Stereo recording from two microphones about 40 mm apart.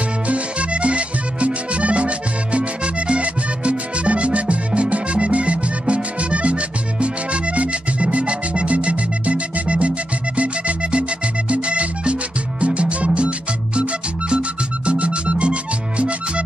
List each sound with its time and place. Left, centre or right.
0.3 s music: right
14.9 s music: right